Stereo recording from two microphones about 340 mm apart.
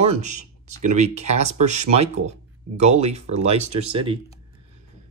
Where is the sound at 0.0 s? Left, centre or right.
Right.